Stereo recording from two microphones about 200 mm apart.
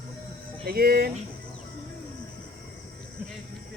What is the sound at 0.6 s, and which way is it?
Speech, 50° right (ahead or behind).